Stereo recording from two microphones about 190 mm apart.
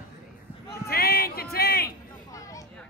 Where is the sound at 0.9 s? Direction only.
55° left (ahead or behind).